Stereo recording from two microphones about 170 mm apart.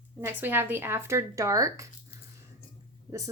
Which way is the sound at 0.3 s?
10° right (ahead or behind).